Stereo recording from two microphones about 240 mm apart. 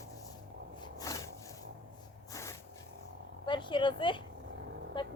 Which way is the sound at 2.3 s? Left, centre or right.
Centre.